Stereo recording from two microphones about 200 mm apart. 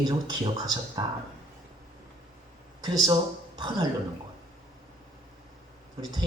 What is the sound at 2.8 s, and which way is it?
Speech, 20° right (ahead or behind).